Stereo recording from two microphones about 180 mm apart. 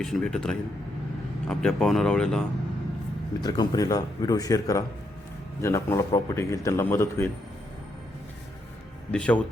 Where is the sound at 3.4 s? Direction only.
20° left (ahead or behind).